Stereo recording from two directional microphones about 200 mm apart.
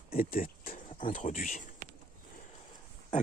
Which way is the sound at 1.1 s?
40° left (ahead or behind).